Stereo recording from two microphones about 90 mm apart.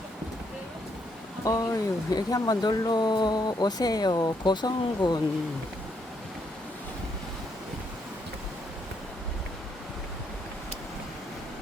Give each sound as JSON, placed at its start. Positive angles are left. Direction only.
{"t": 1.5, "sound": "speech", "side_deg": 40}